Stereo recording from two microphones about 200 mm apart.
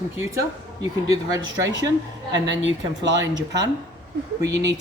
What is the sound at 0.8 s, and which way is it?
Speech, 15° right (ahead or behind).